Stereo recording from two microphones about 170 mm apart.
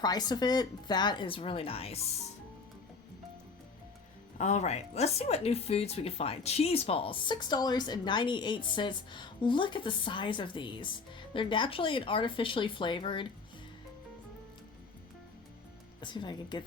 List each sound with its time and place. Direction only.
0.0 s speech: 25° left (ahead or behind)
4.4 s speech: 40° left (ahead or behind)
16.0 s speech: 25° left (ahead or behind)